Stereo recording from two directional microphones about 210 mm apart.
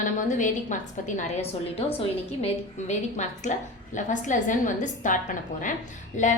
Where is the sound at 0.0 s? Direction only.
35° left (ahead or behind).